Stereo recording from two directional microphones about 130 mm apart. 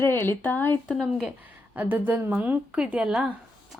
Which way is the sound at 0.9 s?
Centre (ahead or behind).